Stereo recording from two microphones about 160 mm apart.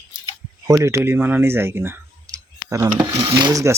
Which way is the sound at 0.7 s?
20° right (ahead or behind).